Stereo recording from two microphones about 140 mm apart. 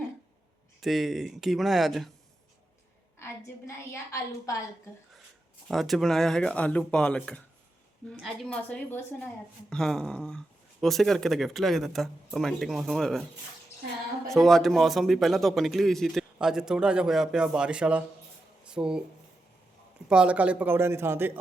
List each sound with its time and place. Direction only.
0.8 s a woman's voice: centre (ahead or behind)
3.7 s a woman's voice: 25° left (ahead or behind)
5.6 s a woman's voice: centre (ahead or behind)
14.3 s a woman's voice: centre (ahead or behind)
20.1 s speech: 10° right (ahead or behind)